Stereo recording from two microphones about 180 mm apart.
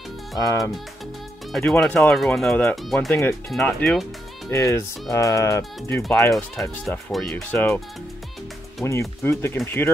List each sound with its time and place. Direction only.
0.4 s speech: 20° left (ahead or behind)
1.5 s speech: centre (ahead or behind)
3.1 s speech: 15° left (ahead or behind)
3.5 s speech: 5° left (ahead or behind)
4.5 s speech: 15° left (ahead or behind)
6.8 s speech: centre (ahead or behind)